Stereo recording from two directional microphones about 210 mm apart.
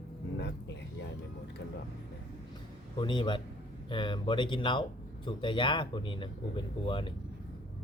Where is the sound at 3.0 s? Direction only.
20° left (ahead or behind).